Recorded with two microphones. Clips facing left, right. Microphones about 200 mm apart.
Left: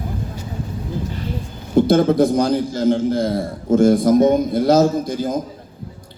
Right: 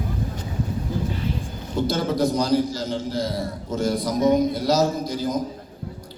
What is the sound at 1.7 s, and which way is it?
A man's voice, 55° left (ahead or behind).